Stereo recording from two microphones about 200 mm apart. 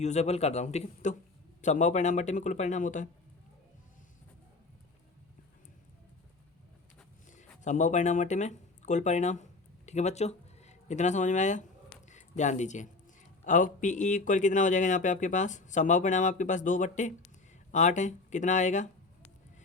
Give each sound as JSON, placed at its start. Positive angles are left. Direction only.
{"t": 0.0, "sound": "speech", "side_deg": 35}
{"t": 7.3, "sound": "speech", "side_deg": 35}